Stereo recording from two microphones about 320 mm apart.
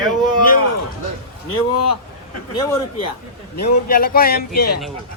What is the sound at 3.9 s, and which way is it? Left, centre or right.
Speech, left.